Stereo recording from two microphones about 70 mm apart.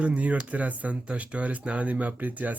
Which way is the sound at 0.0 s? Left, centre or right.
Centre.